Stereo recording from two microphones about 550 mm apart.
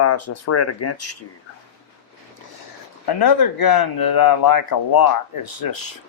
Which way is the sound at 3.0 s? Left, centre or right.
Left.